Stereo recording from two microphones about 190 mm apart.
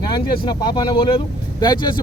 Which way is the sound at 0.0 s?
25° left (ahead or behind).